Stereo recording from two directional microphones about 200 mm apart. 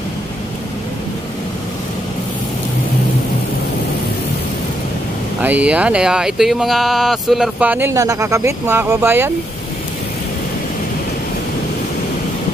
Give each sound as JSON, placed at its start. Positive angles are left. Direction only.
{"t": 5.4, "sound": "speech", "side_deg": -5}